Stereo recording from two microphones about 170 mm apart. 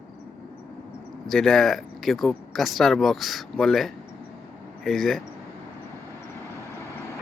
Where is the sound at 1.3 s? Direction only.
Centre (ahead or behind).